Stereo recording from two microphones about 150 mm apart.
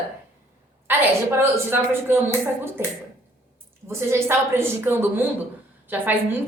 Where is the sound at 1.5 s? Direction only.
15° right (ahead or behind).